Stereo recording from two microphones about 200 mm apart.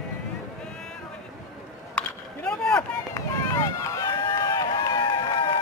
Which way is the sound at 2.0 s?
5° left (ahead or behind).